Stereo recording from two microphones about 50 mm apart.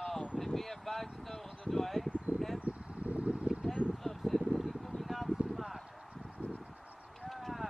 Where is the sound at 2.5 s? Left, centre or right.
Right.